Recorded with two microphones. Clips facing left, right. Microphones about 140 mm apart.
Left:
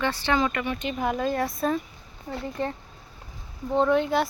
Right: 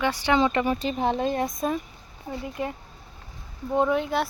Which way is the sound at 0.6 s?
35° right (ahead or behind).